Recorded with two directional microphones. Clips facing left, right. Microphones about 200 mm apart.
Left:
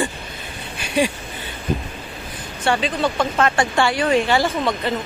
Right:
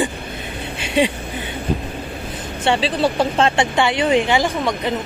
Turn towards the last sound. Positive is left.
turn(degrees=-15)  # may be behind; listen again after turning